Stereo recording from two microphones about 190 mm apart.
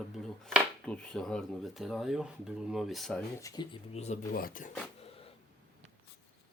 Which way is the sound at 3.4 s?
20° left (ahead or behind).